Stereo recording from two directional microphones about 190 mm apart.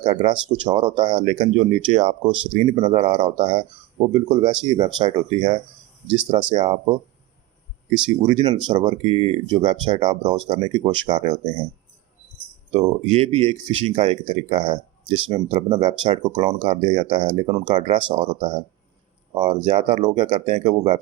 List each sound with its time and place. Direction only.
0.0 s speech: 30° right (ahead or behind)
8.0 s speech: 25° right (ahead or behind)
12.7 s speech: 30° right (ahead or behind)